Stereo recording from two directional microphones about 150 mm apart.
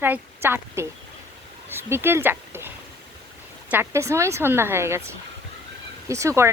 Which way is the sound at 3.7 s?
15° right (ahead or behind).